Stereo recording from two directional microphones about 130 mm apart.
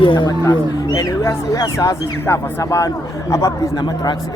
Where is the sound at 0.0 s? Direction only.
40° left (ahead or behind).